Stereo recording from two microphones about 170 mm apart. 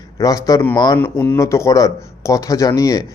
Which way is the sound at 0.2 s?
20° left (ahead or behind).